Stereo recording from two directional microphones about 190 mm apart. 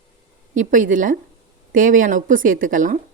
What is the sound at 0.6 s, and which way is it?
Speech, 45° right (ahead or behind).